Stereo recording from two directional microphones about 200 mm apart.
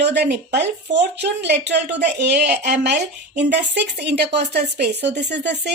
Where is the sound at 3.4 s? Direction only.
60° right (ahead or behind).